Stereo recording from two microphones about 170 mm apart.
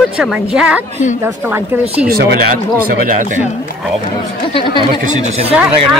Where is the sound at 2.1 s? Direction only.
60° right (ahead or behind).